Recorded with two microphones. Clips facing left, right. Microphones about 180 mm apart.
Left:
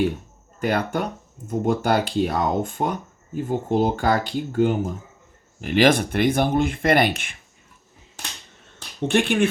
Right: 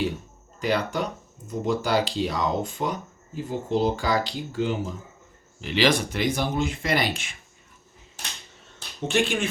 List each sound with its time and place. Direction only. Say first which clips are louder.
0.6 s speech: left 2 dB; 55° left (ahead or behind)
9.0 s speech: left 5 dB; 55° left (ahead or behind)